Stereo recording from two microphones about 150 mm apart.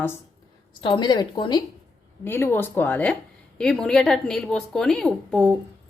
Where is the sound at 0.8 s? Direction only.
30° left (ahead or behind).